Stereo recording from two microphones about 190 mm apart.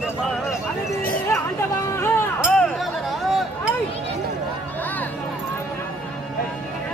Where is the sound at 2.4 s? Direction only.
Centre (ahead or behind).